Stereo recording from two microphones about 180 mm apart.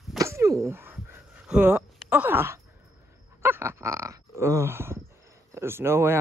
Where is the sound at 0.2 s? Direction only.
15° right (ahead or behind).